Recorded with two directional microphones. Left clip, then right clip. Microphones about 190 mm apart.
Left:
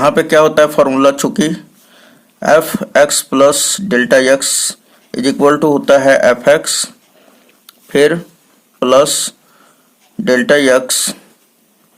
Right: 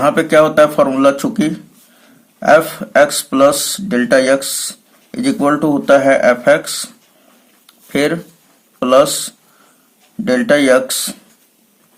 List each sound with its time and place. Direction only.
0.0 s speech: 35° left (ahead or behind)
7.7 s a sound: 30° left (ahead or behind)
8.8 s speech: 35° left (ahead or behind)